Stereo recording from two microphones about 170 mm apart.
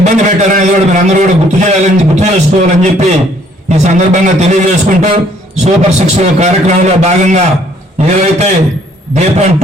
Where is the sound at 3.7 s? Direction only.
45° right (ahead or behind).